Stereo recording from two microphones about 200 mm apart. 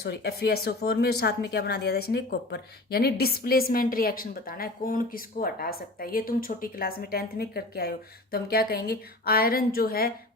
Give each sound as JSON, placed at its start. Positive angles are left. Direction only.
{"t": 0.0, "sound": "speech", "side_deg": 55}